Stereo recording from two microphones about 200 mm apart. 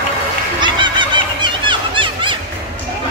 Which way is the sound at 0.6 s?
25° right (ahead or behind).